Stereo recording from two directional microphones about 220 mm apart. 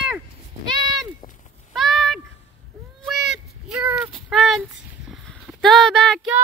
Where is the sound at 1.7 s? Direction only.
Centre (ahead or behind).